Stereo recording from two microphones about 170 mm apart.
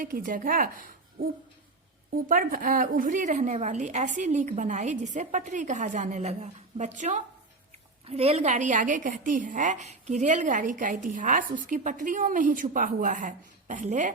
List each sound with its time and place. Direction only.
0.0 s speech: 55° right (ahead or behind)
2.3 s a woman's voice: 55° right (ahead or behind)
8.0 s a woman's voice: 35° right (ahead or behind)